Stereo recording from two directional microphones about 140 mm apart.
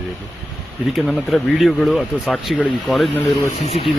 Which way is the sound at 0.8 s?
Centre (ahead or behind).